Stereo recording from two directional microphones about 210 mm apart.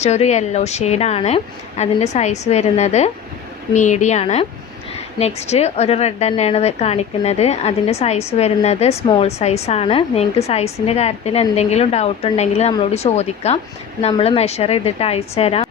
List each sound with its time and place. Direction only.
0.0 s a woman's voice: 30° left (ahead or behind)